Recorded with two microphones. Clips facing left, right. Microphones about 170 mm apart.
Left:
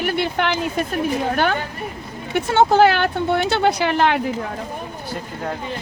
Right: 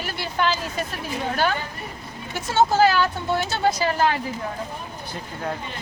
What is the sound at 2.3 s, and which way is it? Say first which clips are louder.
Speech: left 4 dB; 60° left (ahead or behind).